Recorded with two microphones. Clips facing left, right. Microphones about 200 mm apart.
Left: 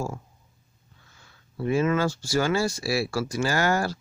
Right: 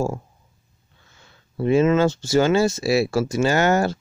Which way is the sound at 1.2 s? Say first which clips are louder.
Right 6 dB; 25° right (ahead or behind).